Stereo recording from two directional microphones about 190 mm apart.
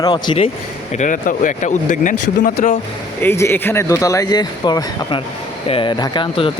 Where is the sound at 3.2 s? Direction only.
15° left (ahead or behind).